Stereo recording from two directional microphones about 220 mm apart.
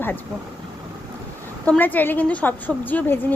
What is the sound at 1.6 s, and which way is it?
Speech, 10° left (ahead or behind).